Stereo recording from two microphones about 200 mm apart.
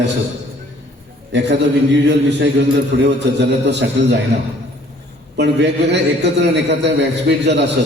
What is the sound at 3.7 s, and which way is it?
Speech, 60° right (ahead or behind).